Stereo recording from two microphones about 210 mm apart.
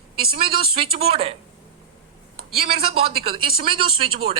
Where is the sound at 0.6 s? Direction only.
30° right (ahead or behind).